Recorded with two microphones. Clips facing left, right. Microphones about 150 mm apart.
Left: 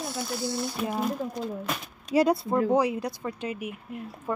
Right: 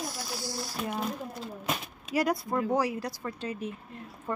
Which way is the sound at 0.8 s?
Centre (ahead or behind).